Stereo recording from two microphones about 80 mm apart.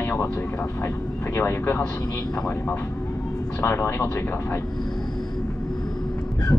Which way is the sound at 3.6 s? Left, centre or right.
Left.